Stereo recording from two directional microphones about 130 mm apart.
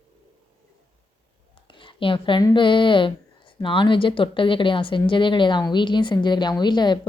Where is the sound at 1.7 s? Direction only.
40° left (ahead or behind).